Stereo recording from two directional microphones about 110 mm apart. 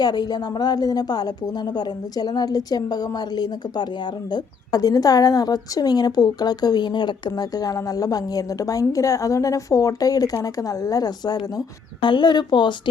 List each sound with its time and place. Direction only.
0.0 s a woman's voice: 40° left (ahead or behind)